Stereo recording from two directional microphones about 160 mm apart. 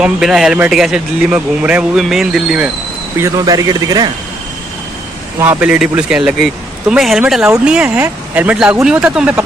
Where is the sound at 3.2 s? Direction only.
20° right (ahead or behind).